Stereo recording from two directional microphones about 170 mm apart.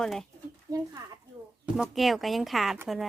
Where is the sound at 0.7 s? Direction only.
20° right (ahead or behind).